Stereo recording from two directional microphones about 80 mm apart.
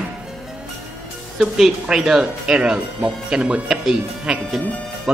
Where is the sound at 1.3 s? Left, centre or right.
Centre.